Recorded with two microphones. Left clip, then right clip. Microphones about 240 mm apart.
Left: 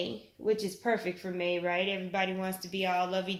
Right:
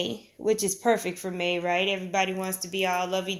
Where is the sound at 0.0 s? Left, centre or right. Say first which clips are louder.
Right 5 dB; right.